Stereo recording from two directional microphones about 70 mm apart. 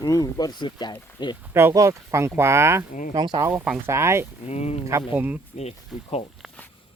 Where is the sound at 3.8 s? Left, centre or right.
Right.